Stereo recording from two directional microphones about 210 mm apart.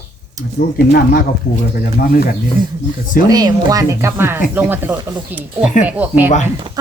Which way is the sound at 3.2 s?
15° right (ahead or behind).